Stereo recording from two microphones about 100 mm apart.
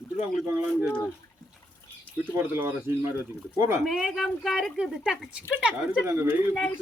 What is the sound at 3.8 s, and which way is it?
Speech, centre (ahead or behind).